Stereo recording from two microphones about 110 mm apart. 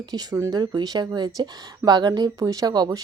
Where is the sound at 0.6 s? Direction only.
40° right (ahead or behind).